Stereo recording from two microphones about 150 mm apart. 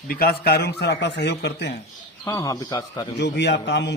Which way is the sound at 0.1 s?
85° left.